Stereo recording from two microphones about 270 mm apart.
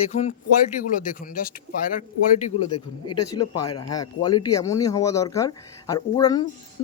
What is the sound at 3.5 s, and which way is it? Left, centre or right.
Speech, left.